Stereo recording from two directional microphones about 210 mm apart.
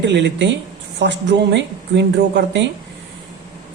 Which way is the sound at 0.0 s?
55° right (ahead or behind).